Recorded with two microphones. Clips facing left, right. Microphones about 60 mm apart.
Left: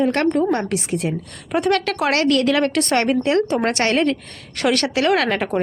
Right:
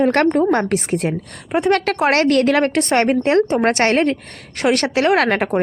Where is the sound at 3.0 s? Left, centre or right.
Right.